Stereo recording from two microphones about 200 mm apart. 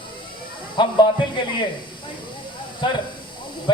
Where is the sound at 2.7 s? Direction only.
25° left (ahead or behind).